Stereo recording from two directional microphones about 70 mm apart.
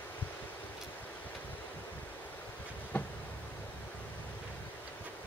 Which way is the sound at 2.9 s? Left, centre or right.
Left.